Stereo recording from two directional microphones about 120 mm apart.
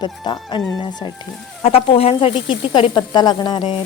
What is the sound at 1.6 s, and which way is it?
Speech, 55° left (ahead or behind).